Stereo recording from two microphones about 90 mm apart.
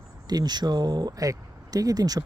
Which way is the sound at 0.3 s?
50° right (ahead or behind).